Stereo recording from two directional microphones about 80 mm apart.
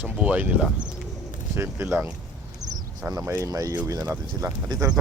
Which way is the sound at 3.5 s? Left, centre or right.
Right.